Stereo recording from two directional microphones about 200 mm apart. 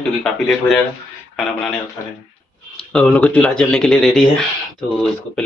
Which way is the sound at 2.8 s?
5° left (ahead or behind).